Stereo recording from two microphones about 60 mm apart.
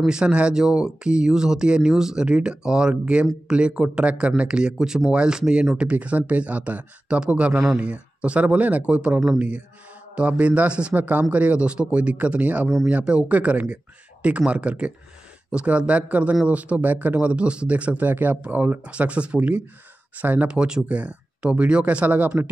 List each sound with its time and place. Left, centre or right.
0.0 s speech: centre
18.1 s speech: right
20.4 s speech: centre